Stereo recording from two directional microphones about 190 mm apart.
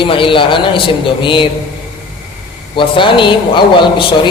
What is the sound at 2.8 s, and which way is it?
A man's voice, 25° left (ahead or behind).